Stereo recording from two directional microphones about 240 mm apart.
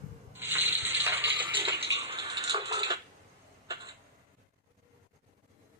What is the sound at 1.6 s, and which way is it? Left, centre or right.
Music, right.